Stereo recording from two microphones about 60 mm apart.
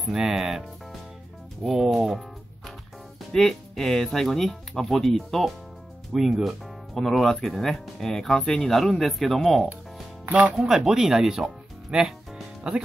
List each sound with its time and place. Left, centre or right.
0.0 s speech: centre
3.3 s speech: centre